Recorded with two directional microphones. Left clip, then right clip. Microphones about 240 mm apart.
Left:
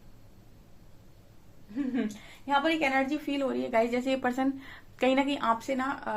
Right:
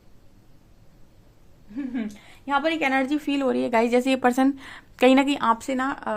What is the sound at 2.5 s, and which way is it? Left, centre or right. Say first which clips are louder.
A woman's voice: right 4 dB; right.